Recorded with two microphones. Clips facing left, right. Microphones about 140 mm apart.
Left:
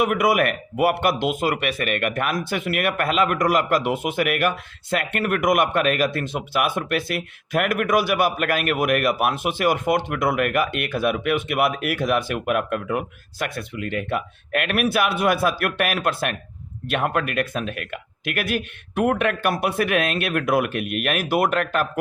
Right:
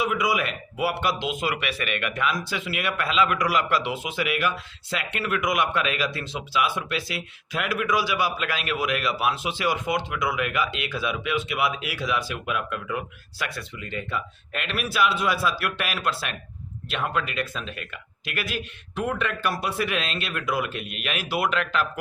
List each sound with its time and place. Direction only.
0.0 s speech: 55° left (ahead or behind)